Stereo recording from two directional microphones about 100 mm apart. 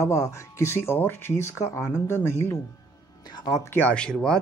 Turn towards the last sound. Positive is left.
turn(degrees=10)  # may be behind; listen again after turning